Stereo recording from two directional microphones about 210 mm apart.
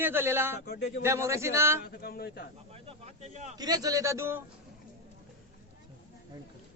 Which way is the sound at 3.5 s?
20° right (ahead or behind).